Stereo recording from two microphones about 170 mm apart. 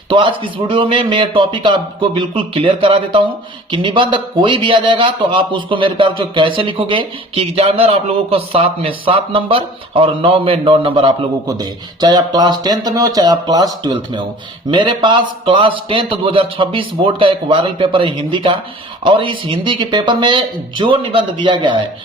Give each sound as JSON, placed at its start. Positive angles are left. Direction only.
{"t": 0.1, "sound": "a man's voice", "side_deg": -30}